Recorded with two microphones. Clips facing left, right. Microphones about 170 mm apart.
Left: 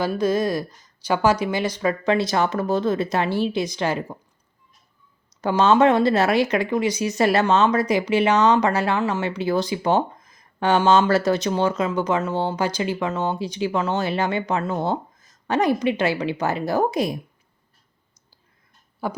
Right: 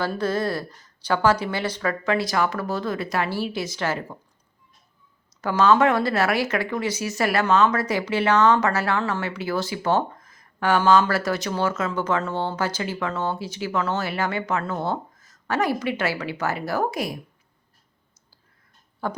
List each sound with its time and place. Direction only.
0.0 s speech: 15° left (ahead or behind)
5.4 s speech: 25° left (ahead or behind)
19.0 s speech: 10° left (ahead or behind)